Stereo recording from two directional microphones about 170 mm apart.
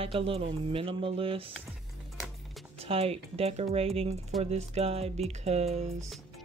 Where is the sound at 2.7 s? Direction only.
35° right (ahead or behind).